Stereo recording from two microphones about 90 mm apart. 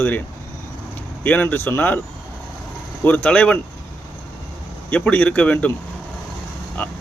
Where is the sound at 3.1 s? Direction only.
15° left (ahead or behind).